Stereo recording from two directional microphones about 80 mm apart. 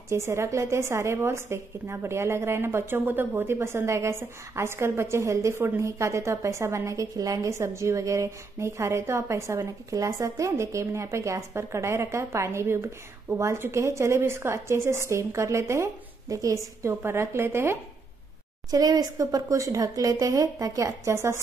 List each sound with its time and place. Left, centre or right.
0.1 s a woman's voice: right
18.7 s speech: right